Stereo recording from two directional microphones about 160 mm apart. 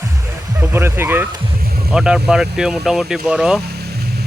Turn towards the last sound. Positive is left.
turn(degrees=-5)  # may be behind; listen again after turning